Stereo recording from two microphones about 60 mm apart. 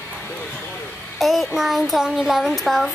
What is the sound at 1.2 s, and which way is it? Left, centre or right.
A child's voice, centre.